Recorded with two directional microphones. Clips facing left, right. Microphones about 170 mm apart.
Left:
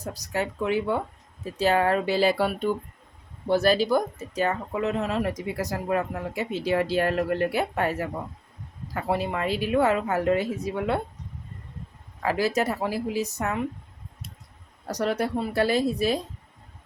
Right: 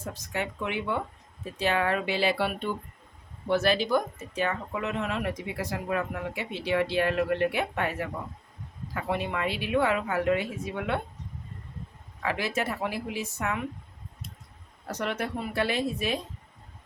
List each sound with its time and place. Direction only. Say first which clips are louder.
0.0 s speech: left 4 dB; 40° left (ahead or behind)
12.2 s speech: left 5 dB; 40° left (ahead or behind)
14.8 s speech: left 5 dB; 35° left (ahead or behind)